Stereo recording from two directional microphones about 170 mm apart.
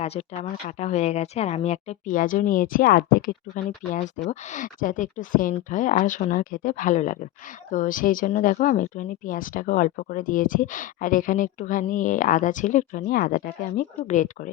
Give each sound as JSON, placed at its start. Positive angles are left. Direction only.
{"t": 0.0, "sound": "speech", "side_deg": 40}